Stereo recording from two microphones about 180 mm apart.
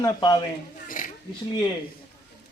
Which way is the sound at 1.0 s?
50° left (ahead or behind).